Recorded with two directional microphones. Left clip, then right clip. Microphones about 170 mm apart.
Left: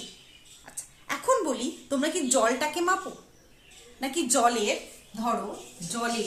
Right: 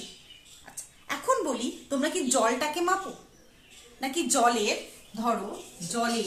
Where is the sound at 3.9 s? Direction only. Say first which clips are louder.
Even; 20° left (ahead or behind).